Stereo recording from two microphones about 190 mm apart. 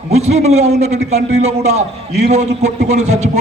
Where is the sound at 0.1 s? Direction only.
35° right (ahead or behind).